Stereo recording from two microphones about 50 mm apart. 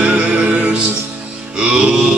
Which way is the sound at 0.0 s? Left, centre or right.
Right.